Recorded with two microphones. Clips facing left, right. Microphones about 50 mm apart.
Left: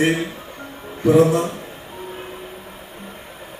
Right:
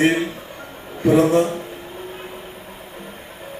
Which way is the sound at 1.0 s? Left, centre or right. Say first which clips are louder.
Even; right.